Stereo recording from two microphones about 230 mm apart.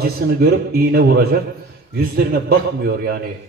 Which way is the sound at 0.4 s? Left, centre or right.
Right.